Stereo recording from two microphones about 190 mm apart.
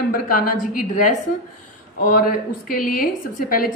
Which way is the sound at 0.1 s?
45° left (ahead or behind).